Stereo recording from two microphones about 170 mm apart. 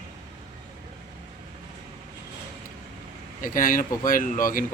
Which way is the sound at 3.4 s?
55° left (ahead or behind).